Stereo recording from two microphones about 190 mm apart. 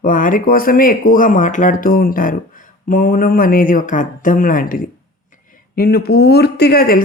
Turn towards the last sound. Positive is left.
turn(degrees=50)  # may be behind; listen again after turning